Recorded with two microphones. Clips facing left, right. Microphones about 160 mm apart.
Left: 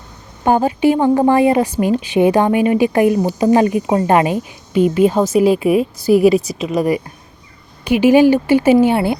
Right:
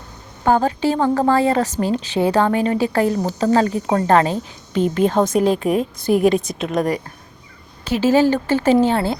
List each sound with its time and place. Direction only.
0.4 s a woman's voice: 15° left (ahead or behind)